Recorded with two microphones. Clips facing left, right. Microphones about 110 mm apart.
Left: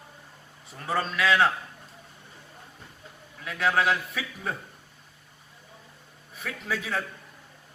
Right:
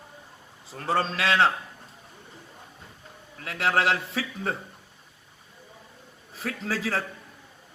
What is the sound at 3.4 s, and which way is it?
A man's voice, 30° right (ahead or behind).